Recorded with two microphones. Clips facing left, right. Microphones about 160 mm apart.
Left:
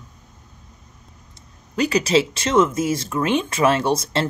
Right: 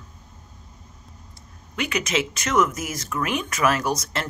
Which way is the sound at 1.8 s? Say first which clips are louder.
Left 7 dB; 35° left (ahead or behind).